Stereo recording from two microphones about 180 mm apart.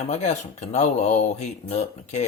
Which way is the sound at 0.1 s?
40° left (ahead or behind).